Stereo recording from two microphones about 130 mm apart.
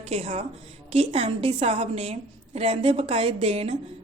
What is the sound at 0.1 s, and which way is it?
A woman's voice, 55° right (ahead or behind).